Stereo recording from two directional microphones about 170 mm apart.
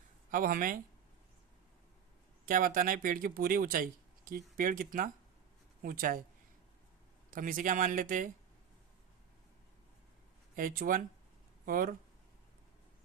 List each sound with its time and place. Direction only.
0.3 s speech: 55° right (ahead or behind)
2.5 s speech: 55° right (ahead or behind)
7.3 s speech: 55° right (ahead or behind)
10.5 s speech: 55° right (ahead or behind)